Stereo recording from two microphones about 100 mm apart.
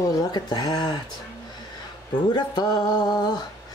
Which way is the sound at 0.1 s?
40° left (ahead or behind).